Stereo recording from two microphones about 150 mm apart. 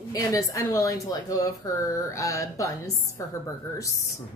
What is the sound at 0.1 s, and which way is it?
Speech, 25° left (ahead or behind).